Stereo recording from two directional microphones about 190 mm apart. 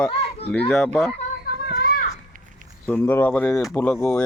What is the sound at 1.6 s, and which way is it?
Children playing, 55° left (ahead or behind).